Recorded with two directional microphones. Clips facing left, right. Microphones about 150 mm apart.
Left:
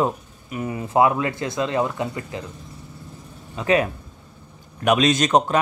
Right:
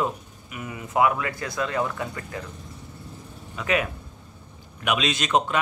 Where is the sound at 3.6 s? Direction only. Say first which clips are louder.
Left 5 dB; 30° left (ahead or behind).